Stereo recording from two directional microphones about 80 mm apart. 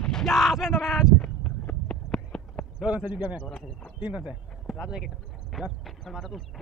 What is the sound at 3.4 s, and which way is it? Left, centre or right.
Speech, centre.